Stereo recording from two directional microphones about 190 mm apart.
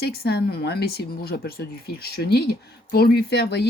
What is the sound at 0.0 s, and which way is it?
Speech, 55° left (ahead or behind).